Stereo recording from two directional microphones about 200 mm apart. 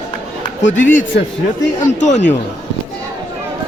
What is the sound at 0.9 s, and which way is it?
Speech, 40° left (ahead or behind).